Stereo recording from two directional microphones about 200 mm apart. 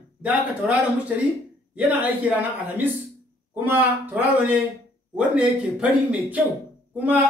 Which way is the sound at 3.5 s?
10° right (ahead or behind).